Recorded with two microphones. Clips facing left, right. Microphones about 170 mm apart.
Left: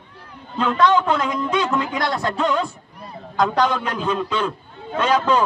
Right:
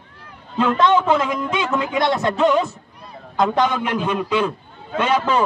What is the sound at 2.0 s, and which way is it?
Speech, 20° right (ahead or behind).